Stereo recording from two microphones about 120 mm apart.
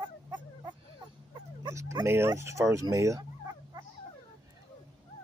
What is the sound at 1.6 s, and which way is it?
Fowl, 30° right (ahead or behind).